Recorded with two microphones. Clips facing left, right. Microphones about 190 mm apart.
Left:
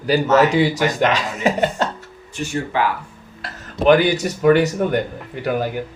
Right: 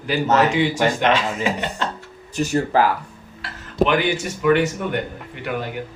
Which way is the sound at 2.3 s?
40° right (ahead or behind).